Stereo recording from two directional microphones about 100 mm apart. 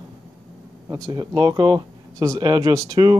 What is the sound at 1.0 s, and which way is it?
Speech, 40° right (ahead or behind).